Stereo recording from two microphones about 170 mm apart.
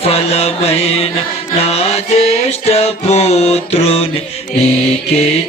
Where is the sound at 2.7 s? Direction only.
40° left (ahead or behind).